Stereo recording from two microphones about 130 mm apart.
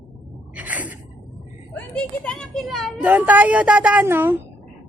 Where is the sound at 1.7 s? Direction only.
10° left (ahead or behind).